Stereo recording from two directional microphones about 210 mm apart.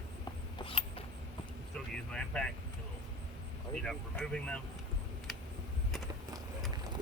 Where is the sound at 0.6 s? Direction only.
25° left (ahead or behind).